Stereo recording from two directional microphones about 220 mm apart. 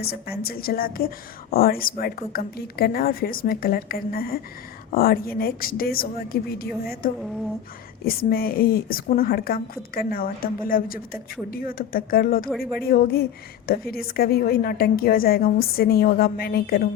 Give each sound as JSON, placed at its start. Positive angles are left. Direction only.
{"t": 0.0, "sound": "a woman's voice", "side_deg": 45}